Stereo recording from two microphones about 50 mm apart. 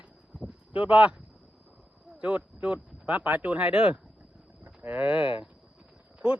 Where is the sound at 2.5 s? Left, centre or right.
Right.